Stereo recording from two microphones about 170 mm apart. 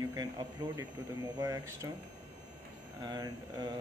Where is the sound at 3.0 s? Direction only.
25° right (ahead or behind).